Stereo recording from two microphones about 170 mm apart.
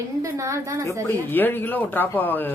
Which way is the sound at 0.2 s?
20° right (ahead or behind).